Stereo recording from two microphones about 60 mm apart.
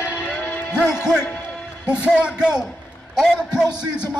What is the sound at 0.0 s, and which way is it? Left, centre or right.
Music, left.